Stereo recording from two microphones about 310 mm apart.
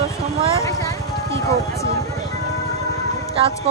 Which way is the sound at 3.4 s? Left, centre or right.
Centre.